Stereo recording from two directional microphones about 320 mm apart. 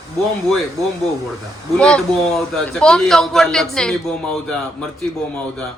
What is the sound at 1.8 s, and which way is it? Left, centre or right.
A man's voice, centre.